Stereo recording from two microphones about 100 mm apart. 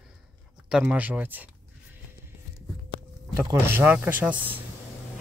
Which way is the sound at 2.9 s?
60° left (ahead or behind).